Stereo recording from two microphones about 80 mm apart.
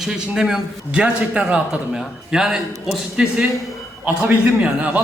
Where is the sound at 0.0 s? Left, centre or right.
Centre.